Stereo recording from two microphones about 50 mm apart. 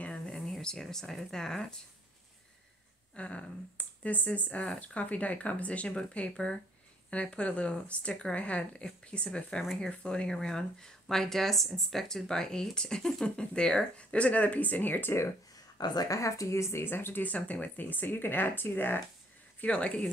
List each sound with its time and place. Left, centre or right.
0.6 s speech: centre
3.2 s speech: left
9.6 s speech: centre
9.8 s speech: centre; by 15.1 s left
16.1 s a woman's voice: left
16.8 s speech: left
17.2 s speech: left
19.6 s speech: left